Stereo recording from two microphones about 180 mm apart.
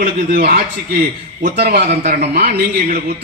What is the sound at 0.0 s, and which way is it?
A man's voice, 55° right (ahead or behind).